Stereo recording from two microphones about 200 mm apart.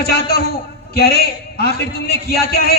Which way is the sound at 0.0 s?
50° left (ahead or behind).